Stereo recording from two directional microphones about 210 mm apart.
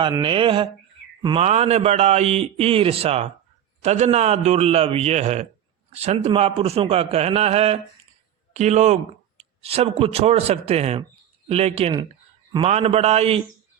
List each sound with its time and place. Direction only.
0.0 s a man's voice: 20° right (ahead or behind)